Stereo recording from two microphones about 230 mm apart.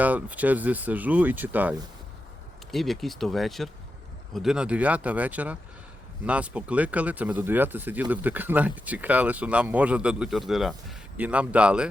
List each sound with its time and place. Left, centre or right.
0.0 s speech: centre
2.7 s speech: centre